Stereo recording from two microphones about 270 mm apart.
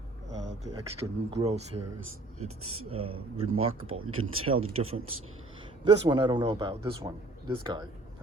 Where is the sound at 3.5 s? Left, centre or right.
Right.